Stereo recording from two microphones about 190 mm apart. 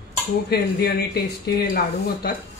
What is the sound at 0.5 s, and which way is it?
Speech, 55° left (ahead or behind).